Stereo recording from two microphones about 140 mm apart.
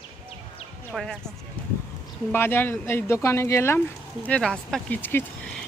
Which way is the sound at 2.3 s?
15° left (ahead or behind).